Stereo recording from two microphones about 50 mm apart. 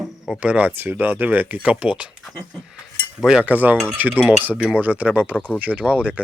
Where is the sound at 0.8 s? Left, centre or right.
Right.